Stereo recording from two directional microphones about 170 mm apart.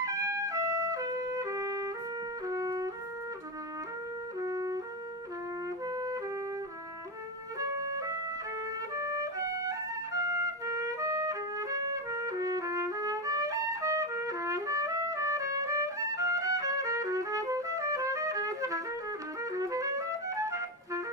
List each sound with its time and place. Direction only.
0.0 s music: 20° right (ahead or behind)
4.4 s music: 20° right (ahead or behind)
7.8 s music: 20° right (ahead or behind)
10.7 s trumpet: 20° right (ahead or behind)
19.5 s clarinet: 20° right (ahead or behind)